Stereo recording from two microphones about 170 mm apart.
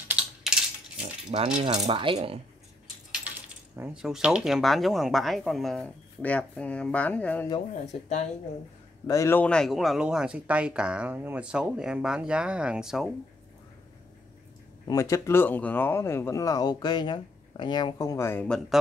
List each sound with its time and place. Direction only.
0.1 s typing: 5° right (ahead or behind)
1.3 s speech: 40° right (ahead or behind)
3.7 s speech: 15° right (ahead or behind); by 7.4 s 10° left (ahead or behind)
7.8 s speech: 40° left (ahead or behind)
9.0 s speech: 20° left (ahead or behind); by 13.1 s centre (ahead or behind)
14.9 s speech: 20° left (ahead or behind)